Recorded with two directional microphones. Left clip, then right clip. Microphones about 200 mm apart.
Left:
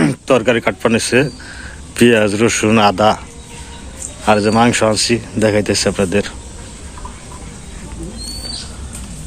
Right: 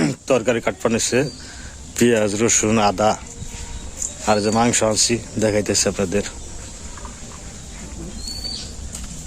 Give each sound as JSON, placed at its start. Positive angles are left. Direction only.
{"t": 0.0, "sound": "speech", "side_deg": 0}
{"t": 4.3, "sound": "speech", "side_deg": 0}